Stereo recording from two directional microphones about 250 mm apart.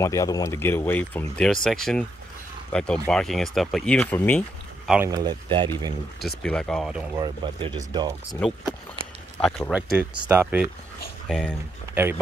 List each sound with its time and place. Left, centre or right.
0.0 s speech: centre
6.2 s speech: centre
7.2 s speech: centre
9.4 s speech: centre
11.2 s speech: centre
11.9 s speech: centre